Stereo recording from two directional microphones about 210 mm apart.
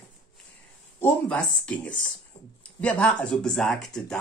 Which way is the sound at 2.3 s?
25° left (ahead or behind).